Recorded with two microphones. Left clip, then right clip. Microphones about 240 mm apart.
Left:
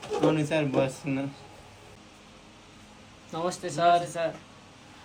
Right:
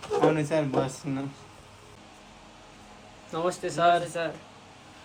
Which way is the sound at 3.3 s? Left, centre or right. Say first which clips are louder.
Right 2 dB; left.